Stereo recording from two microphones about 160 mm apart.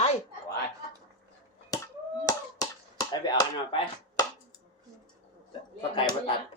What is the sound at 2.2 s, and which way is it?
Finger snapping, 25° left (ahead or behind).